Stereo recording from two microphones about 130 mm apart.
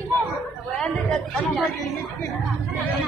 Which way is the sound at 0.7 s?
5° left (ahead or behind).